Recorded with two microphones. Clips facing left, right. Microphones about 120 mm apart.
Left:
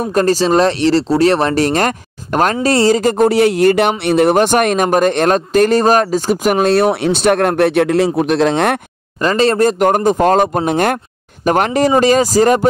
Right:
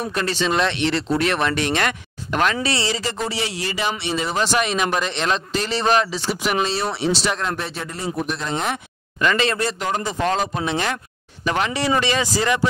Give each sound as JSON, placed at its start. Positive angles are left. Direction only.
{"t": 0.0, "sound": "speech", "side_deg": 45}
{"t": 9.2, "sound": "speech", "side_deg": 35}